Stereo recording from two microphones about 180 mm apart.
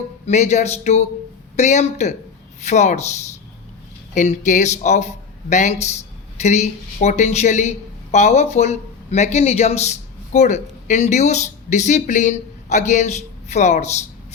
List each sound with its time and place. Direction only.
0.3 s a man's voice: 40° left (ahead or behind)